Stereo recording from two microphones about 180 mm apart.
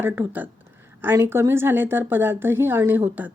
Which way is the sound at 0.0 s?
10° right (ahead or behind).